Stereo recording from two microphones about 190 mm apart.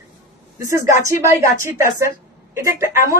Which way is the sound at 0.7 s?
15° right (ahead or behind).